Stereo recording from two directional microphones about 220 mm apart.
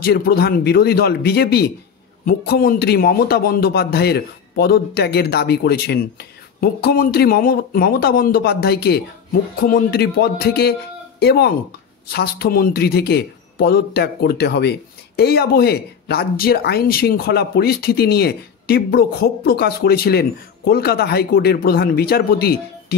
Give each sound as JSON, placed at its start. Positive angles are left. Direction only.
{"t": 0.0, "sound": "a man's voice", "side_deg": 45}